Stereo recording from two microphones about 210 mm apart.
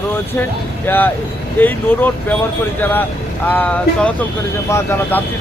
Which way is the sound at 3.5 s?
5° left (ahead or behind).